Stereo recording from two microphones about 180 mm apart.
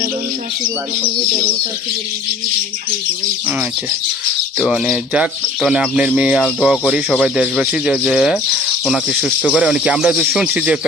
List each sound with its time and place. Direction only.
4.6 s speech: 5° right (ahead or behind)